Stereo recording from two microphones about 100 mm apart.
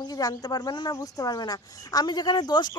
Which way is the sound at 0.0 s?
40° left (ahead or behind).